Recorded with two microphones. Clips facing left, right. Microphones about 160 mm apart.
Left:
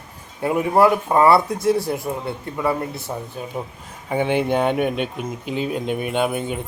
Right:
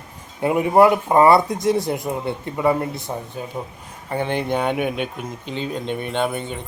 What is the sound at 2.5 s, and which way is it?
Speech, 20° right (ahead or behind).